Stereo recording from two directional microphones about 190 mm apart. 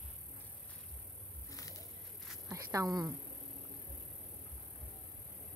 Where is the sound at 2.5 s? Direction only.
15° right (ahead or behind).